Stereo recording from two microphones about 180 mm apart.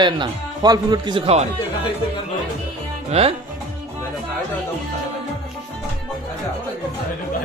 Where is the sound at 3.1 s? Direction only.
35° right (ahead or behind).